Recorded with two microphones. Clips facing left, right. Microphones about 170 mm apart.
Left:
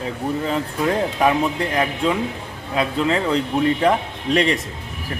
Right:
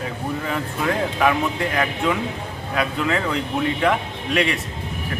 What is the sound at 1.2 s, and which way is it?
A man's voice, 25° left (ahead or behind).